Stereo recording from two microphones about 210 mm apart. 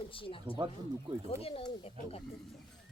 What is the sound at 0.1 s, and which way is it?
Speech, 25° left (ahead or behind).